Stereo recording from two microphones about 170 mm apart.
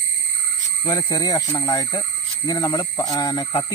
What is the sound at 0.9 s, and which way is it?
Speech, 25° left (ahead or behind).